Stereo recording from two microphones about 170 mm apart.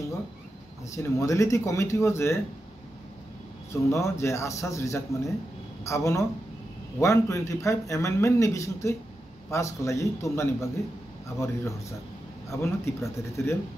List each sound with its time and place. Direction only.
0.9 s speech: 20° left (ahead or behind)
3.7 s speech: 15° left (ahead or behind)